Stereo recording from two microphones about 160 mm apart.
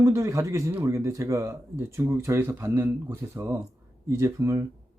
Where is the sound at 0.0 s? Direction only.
20° right (ahead or behind).